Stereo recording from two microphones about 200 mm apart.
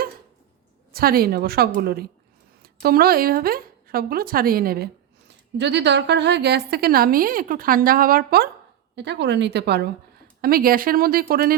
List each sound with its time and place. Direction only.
0.9 s a woman's voice: 50° right (ahead or behind)
5.5 s a woman's voice: 60° right (ahead or behind)
9.0 s a woman's voice: 60° right (ahead or behind)